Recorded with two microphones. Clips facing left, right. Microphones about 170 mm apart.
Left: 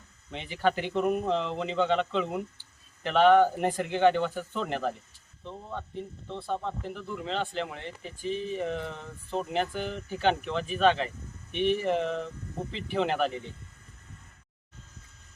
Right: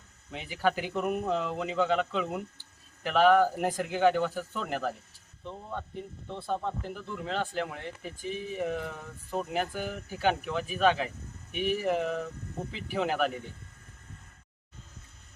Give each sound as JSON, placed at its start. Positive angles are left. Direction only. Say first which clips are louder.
{"t": 0.3, "sound": "speech", "louder": "left 1 dB", "side_deg": -5}